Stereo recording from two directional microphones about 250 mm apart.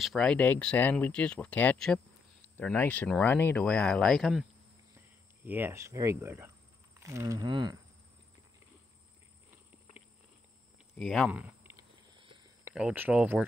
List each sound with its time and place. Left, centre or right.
0.0 s speech: centre
11.0 s a sound: centre
12.7 s speech: centre